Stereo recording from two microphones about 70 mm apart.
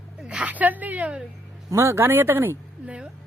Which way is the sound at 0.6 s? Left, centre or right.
Right.